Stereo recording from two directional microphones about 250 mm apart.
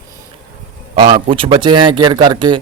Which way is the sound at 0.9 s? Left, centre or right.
Centre.